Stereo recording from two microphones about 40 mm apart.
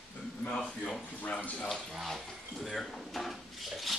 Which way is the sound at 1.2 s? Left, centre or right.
Left.